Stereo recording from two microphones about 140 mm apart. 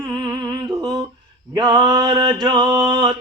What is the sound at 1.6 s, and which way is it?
Music, 30° right (ahead or behind).